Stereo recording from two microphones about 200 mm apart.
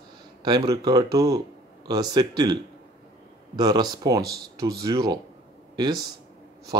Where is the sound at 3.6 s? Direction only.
20° right (ahead or behind).